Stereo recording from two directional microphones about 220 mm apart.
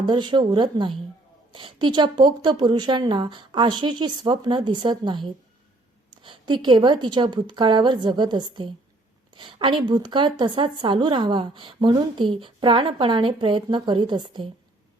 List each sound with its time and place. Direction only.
0.0 s speech: 20° right (ahead or behind)